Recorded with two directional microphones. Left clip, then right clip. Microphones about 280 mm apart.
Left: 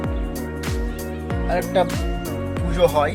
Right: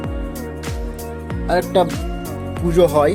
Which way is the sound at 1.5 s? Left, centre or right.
Centre.